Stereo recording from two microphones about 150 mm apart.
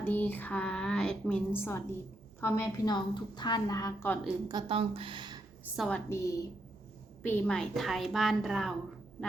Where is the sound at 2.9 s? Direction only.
30° left (ahead or behind).